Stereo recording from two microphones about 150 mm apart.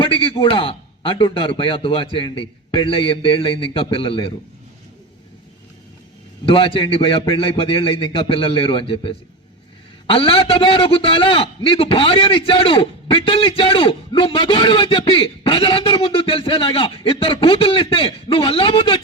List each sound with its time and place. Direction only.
0.0 s a man's voice: 35° left (ahead or behind)
6.4 s a man's voice: 35° left (ahead or behind)